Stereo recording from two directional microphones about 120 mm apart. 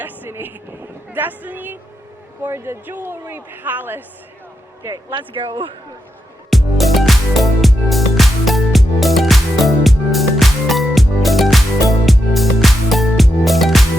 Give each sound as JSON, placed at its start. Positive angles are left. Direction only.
{"t": 0.0, "sound": "vehicle", "side_deg": -15}
{"t": 1.1, "sound": "a man's voice", "side_deg": -15}
{"t": 5.1, "sound": "speech", "side_deg": -45}
{"t": 6.5, "sound": "music", "side_deg": 0}